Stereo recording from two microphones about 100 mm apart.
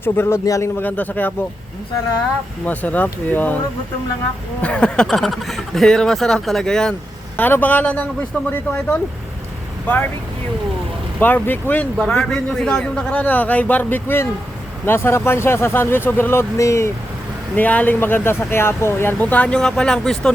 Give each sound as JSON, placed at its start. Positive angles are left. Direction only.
{"t": 0.0, "sound": "speech", "side_deg": 25}
{"t": 0.8, "sound": "speech", "side_deg": 15}
{"t": 2.6, "sound": "speech", "side_deg": 15}
{"t": 4.6, "sound": "speech", "side_deg": 10}
{"t": 7.3, "sound": "speech", "side_deg": 20}
{"t": 11.2, "sound": "speech", "side_deg": 20}
{"t": 11.9, "sound": "speech", "side_deg": 10}
{"t": 17.5, "sound": "speech", "side_deg": 15}